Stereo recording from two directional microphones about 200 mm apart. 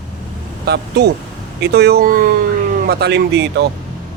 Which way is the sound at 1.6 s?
55° right (ahead or behind).